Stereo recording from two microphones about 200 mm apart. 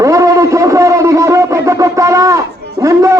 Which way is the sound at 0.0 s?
15° right (ahead or behind).